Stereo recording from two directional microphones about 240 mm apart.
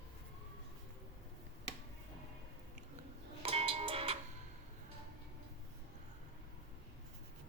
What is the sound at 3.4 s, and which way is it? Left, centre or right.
Music, right.